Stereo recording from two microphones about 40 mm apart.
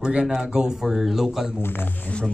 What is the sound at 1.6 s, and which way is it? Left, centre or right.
Speech, left.